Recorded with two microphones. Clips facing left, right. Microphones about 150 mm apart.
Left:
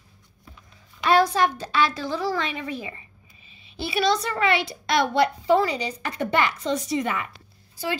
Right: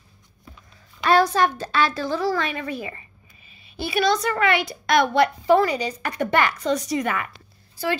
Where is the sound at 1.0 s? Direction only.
15° left (ahead or behind).